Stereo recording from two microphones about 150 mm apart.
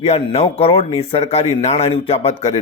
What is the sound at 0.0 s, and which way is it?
Speech, 40° left (ahead or behind).